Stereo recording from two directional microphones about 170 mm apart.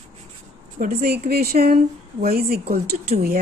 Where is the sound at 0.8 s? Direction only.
60° right (ahead or behind).